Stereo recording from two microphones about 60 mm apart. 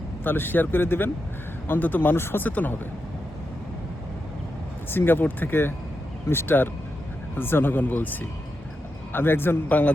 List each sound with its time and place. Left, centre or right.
0.3 s speech: left
2.5 s speech: left
4.9 s speech: left